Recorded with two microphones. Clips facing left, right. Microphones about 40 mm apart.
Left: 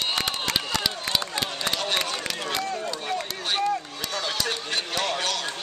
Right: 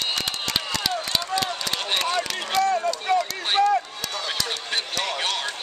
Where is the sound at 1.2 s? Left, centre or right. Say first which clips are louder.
Right 3 dB; left.